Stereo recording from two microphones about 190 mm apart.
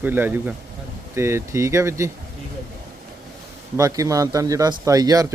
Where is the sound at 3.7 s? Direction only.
15° right (ahead or behind).